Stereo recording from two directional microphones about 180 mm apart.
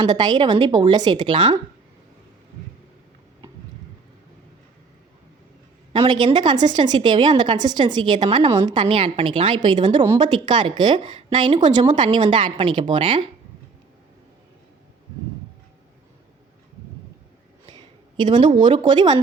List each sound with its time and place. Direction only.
0.0 s a woman's voice: 25° right (ahead or behind)
5.9 s a woman's voice: 25° right (ahead or behind)
17.7 s a sound: 25° right (ahead or behind)
18.6 s a woman's voice: 25° right (ahead or behind)